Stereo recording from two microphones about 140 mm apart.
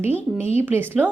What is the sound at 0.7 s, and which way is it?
Speech, 15° right (ahead or behind).